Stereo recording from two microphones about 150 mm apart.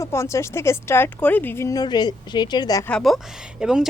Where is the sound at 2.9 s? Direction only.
5° left (ahead or behind).